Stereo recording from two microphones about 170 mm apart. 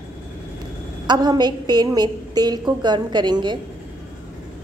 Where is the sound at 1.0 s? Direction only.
25° right (ahead or behind).